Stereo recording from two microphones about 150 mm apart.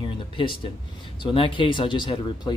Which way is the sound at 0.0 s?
35° left (ahead or behind).